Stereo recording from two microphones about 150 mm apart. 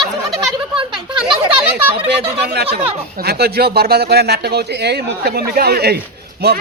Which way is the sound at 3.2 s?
90° right.